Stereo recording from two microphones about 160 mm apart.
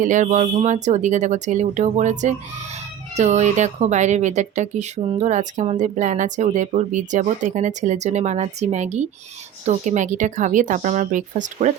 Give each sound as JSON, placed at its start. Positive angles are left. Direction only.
{"t": 0.0, "sound": "speech", "side_deg": -50}